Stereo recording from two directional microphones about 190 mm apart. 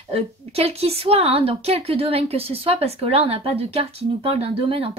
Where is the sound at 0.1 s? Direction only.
30° right (ahead or behind).